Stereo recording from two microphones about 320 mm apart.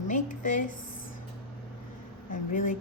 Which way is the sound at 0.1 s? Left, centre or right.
Left.